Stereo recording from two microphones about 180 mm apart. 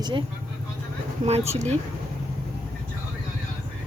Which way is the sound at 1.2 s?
35° right (ahead or behind).